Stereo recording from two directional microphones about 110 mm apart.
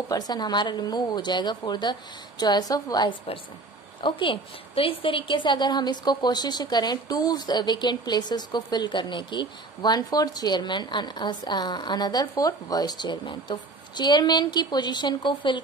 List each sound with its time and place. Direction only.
0.1 s a woman's voice: 35° left (ahead or behind)
4.0 s a woman's voice: 50° left (ahead or behind)